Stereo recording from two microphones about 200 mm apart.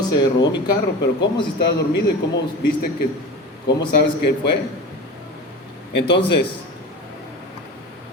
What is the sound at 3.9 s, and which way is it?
Speech, 55° left (ahead or behind).